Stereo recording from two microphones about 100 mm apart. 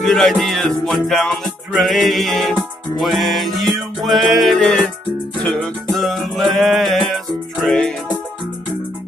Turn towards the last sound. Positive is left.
turn(degrees=5)  # may be behind; listen again after turning